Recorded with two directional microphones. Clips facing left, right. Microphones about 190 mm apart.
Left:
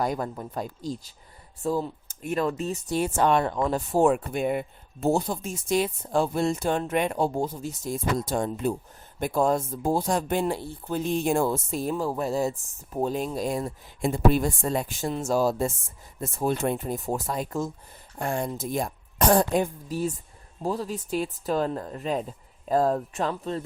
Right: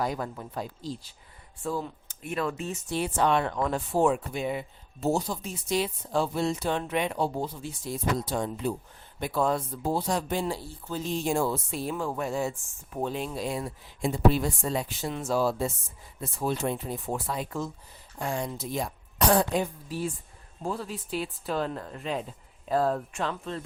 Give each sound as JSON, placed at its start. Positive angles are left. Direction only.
{"t": 0.0, "sound": "speech", "side_deg": 45}
{"t": 3.5, "sound": "speech", "side_deg": 35}